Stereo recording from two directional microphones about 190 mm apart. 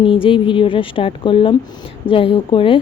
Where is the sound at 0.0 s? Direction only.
25° left (ahead or behind).